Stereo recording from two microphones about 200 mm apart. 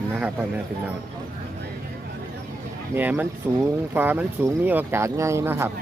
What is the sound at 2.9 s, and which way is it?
Speech, 10° right (ahead or behind).